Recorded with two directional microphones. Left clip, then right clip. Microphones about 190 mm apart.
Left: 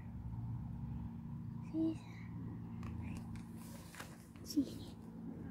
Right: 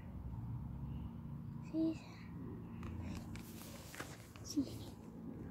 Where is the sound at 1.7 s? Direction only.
5° right (ahead or behind).